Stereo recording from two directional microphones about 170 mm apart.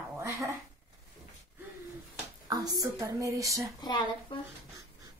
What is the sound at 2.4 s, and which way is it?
Speech, 20° right (ahead or behind).